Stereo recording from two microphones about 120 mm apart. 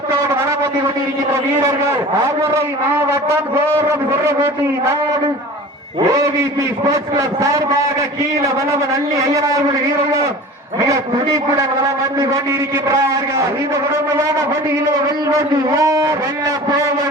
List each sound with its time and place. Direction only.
2.4 s a man's voice: 25° right (ahead or behind)
6.9 s a man's voice: 25° right (ahead or behind)
8.9 s a man's voice: 25° right (ahead or behind)
12.2 s a man's voice: 25° right (ahead or behind)
15.8 s a man's voice: 30° right (ahead or behind)